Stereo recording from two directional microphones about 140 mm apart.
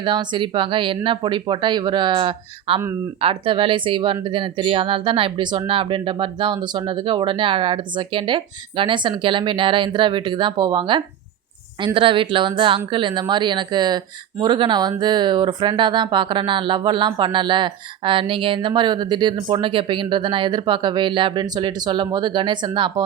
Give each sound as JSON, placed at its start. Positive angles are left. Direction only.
{"t": 0.0, "sound": "speech", "side_deg": -35}